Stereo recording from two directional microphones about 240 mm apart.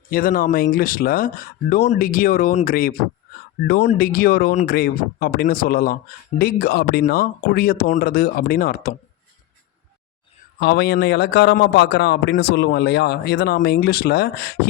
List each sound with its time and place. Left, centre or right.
0.1 s speech: left
10.6 s a man's voice: left